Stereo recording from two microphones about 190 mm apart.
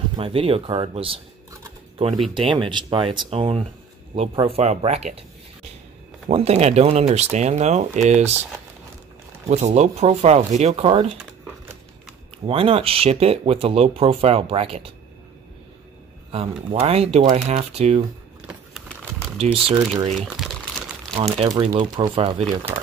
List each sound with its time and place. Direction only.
0.1 s speech: 30° right (ahead or behind)
2.3 s speech: 25° right (ahead or behind)
6.2 s speech: 35° right (ahead or behind)
9.5 s speech: 35° right (ahead or behind)
12.4 s speech: 30° right (ahead or behind)
16.3 s speech: 30° right (ahead or behind)
19.3 s speech: 30° right (ahead or behind)
20.2 s crumpling: centre (ahead or behind)
21.5 s speech: 25° right (ahead or behind)